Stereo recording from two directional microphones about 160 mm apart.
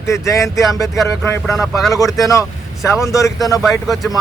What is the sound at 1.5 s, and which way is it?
Speech, centre (ahead or behind).